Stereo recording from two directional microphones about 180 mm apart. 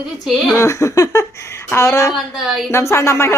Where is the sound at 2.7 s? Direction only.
15° left (ahead or behind).